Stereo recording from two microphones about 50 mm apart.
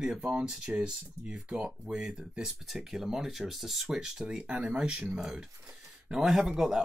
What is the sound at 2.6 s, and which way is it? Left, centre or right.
Speech, centre.